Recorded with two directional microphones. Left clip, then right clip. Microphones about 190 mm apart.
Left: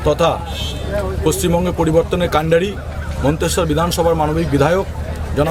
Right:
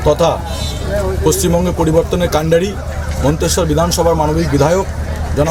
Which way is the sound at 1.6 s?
10° left (ahead or behind).